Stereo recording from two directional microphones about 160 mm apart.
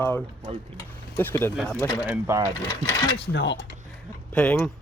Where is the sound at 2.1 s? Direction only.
15° right (ahead or behind).